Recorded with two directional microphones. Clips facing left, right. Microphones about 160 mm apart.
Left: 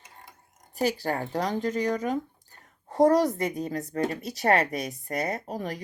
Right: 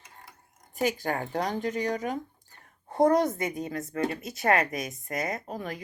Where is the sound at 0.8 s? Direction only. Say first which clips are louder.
Left 1 dB; 35° left (ahead or behind).